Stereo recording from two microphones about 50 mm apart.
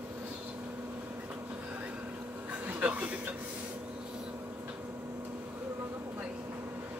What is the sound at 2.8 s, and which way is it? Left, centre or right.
Speech, right.